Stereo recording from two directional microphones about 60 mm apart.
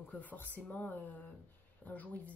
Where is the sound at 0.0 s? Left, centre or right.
Left.